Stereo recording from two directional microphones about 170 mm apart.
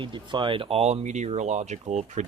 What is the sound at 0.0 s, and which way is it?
Speech, 30° right (ahead or behind).